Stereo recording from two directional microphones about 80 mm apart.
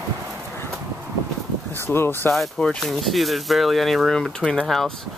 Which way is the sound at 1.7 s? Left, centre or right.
Left.